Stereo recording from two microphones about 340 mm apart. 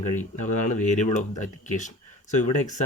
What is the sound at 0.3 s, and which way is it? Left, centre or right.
Speech, left.